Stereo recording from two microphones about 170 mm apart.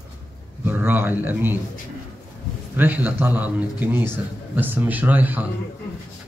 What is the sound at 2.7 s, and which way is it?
A man's voice, 10° right (ahead or behind).